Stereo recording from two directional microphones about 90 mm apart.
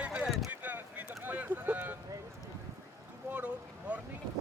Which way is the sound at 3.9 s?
15° right (ahead or behind).